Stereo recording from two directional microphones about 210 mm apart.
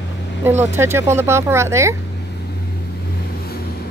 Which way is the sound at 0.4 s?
10° right (ahead or behind).